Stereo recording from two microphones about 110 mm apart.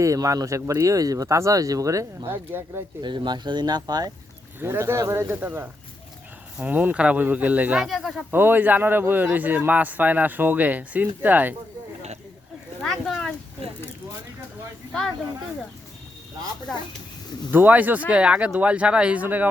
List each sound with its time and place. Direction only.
0.0 s speech: 30° right (ahead or behind)
3.0 s speech: 45° right (ahead or behind)
4.6 s speech: 25° right (ahead or behind)
7.9 s speech: centre (ahead or behind)
8.3 s speech: 20° right (ahead or behind)
12.8 s a sound: centre (ahead or behind)
16.7 s speech: 5° left (ahead or behind)
17.5 s speech: 15° right (ahead or behind)